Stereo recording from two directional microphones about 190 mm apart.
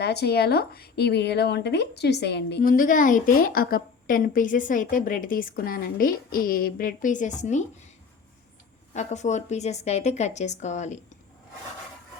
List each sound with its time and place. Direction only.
0.0 s speech: 60° left (ahead or behind); by 7.6 s 40° left (ahead or behind)
8.9 s a woman's voice: 40° left (ahead or behind)